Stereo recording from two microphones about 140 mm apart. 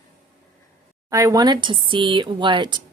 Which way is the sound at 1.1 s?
25° right (ahead or behind).